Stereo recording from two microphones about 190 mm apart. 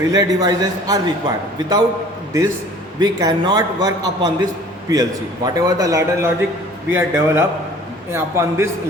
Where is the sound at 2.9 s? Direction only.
20° right (ahead or behind).